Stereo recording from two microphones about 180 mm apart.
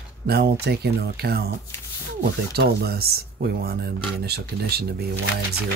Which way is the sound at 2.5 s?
60° right (ahead or behind).